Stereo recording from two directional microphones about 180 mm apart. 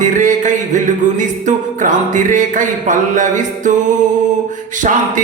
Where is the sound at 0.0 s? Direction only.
45° right (ahead or behind).